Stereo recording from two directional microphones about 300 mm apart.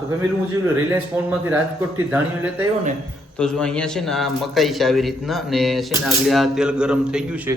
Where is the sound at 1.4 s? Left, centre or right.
Centre.